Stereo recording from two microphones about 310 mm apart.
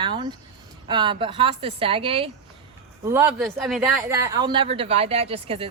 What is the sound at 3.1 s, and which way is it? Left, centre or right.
A woman's voice, centre.